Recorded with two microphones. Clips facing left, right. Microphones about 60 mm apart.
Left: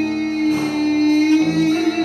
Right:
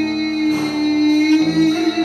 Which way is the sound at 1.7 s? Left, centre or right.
Left.